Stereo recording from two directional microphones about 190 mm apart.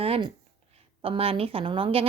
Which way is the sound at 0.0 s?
30° right (ahead or behind).